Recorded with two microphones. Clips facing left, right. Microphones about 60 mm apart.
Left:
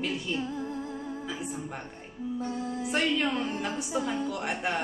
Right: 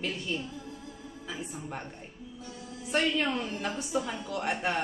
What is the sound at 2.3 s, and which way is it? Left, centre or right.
Speech, left.